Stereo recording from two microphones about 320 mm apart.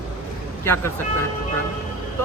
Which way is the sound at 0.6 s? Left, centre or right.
Centre.